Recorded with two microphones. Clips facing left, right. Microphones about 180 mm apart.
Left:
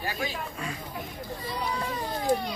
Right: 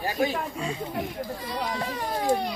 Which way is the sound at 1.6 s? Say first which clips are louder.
Right 1 dB; 90° right.